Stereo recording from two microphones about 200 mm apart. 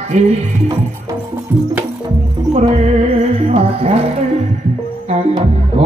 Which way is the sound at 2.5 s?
30° right (ahead or behind).